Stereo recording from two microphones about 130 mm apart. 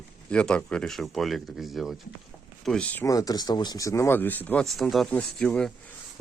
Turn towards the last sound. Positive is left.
turn(degrees=5)  # may be behind; listen again after turning